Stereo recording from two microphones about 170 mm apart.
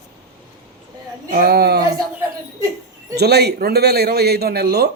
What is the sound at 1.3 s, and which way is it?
Speech, 65° right (ahead or behind).